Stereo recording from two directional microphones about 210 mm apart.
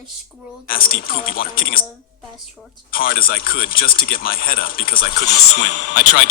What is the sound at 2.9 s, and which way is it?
Speech, 45° left (ahead or behind).